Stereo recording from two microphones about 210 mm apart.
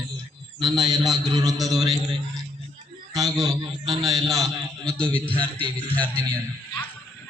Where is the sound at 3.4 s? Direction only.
20° right (ahead or behind).